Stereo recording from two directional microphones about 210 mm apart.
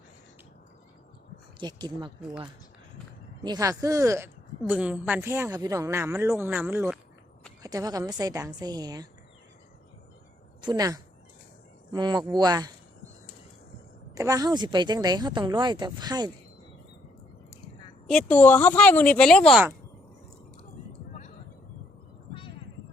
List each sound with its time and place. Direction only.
1.5 s speech: 20° right (ahead or behind)
3.4 s speech: 15° right (ahead or behind)
10.6 s speech: 20° right (ahead or behind)
14.2 s speech: 15° right (ahead or behind)
18.0 s speech: 5° left (ahead or behind)
22.3 s a sound: 25° left (ahead or behind)